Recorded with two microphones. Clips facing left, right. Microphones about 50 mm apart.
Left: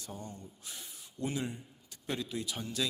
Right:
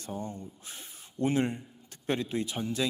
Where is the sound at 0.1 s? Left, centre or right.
Right.